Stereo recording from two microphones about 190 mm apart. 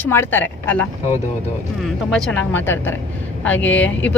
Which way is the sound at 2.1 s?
5° left (ahead or behind).